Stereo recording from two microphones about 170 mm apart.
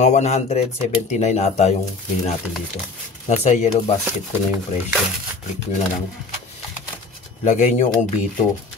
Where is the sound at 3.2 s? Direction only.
40° left (ahead or behind).